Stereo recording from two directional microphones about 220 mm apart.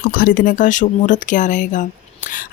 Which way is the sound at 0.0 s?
40° left (ahead or behind).